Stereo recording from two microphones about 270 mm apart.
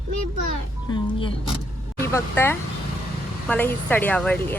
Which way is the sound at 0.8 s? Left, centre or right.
Centre.